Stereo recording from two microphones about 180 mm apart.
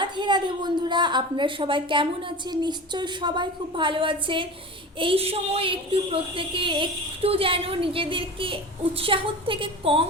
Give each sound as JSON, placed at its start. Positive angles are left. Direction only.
{"t": 0.0, "sound": "a woman's voice", "side_deg": -25}